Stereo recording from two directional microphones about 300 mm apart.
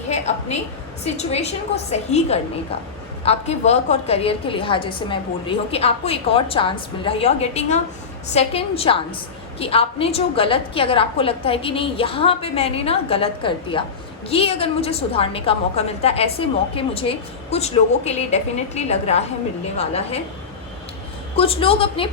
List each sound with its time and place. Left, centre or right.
0.1 s a woman's voice: left
21.3 s a woman's voice: centre